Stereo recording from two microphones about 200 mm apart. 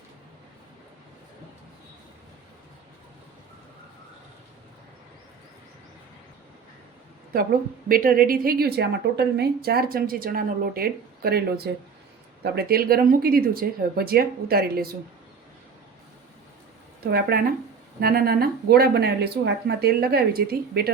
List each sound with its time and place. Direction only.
7.9 s a woman's voice: 45° right (ahead or behind)
17.1 s a woman's voice: 50° right (ahead or behind)